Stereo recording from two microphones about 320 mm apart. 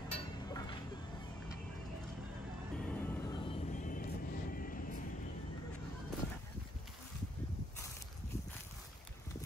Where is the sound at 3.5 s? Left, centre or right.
Left.